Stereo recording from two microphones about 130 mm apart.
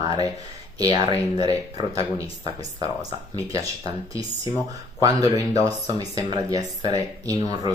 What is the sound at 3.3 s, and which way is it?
Speech, 25° right (ahead or behind).